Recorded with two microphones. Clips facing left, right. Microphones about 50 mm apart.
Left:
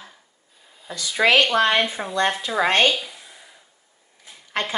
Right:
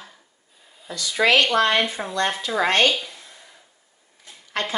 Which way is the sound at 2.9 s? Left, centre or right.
Centre.